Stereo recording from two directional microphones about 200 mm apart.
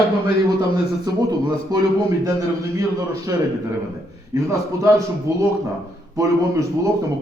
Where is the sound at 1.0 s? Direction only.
20° right (ahead or behind).